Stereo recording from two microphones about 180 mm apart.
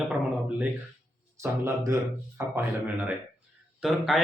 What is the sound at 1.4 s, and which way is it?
A man's voice, 15° right (ahead or behind).